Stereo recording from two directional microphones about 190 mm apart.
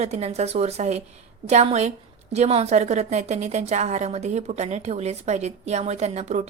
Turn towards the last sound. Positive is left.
turn(degrees=-35)  # may be behind; listen again after turning